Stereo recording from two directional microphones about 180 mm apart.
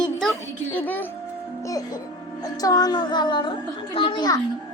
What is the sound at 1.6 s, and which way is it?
A child's voice, 20° left (ahead or behind).